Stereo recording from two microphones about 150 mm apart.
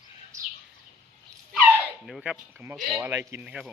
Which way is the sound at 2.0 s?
Centre (ahead or behind).